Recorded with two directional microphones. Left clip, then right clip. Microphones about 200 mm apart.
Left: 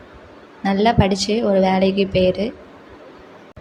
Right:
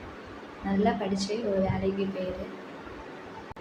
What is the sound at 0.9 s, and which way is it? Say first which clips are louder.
A woman's voice: left 13 dB; 45° left (ahead or behind).